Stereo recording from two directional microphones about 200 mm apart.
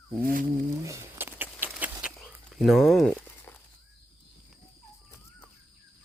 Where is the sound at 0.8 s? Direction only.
15° right (ahead or behind); by 3.6 s 5° left (ahead or behind).